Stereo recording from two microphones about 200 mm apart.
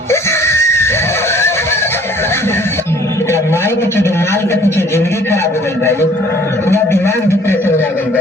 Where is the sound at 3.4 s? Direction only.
10° left (ahead or behind).